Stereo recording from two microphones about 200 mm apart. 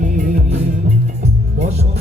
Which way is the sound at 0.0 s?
40° right (ahead or behind).